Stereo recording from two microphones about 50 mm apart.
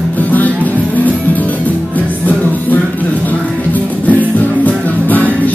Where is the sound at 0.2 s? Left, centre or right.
Left.